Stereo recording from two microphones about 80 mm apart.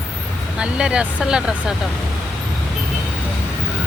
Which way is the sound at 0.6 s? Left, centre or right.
Centre.